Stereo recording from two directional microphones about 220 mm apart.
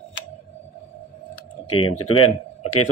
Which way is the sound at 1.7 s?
80° left.